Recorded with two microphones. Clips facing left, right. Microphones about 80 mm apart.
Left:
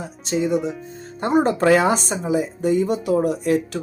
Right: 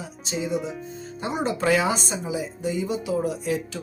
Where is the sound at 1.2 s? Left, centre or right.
Left.